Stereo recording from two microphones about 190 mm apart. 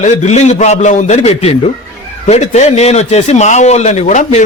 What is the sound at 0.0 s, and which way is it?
A man's voice, 35° left (ahead or behind).